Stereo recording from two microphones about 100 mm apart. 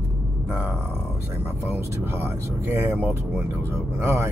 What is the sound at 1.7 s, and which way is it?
Speech, 20° right (ahead or behind).